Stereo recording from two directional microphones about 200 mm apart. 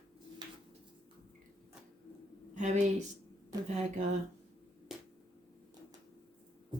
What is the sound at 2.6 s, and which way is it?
Speech, 35° right (ahead or behind).